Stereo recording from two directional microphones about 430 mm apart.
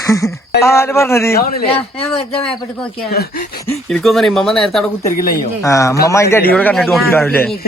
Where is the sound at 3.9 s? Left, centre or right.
Centre.